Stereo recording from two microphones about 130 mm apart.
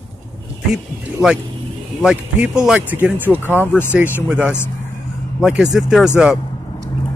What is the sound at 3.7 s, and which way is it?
Speech, 15° left (ahead or behind).